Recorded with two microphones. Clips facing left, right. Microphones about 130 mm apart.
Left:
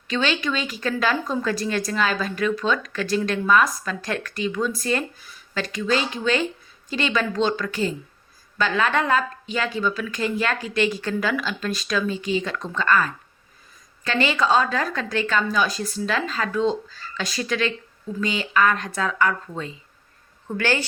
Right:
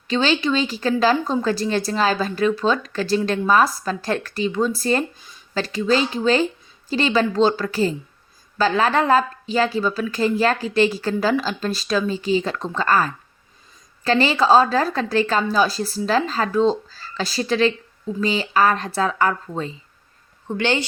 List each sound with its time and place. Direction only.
0.1 s speech: 30° right (ahead or behind)
20.5 s a woman's voice: 20° right (ahead or behind)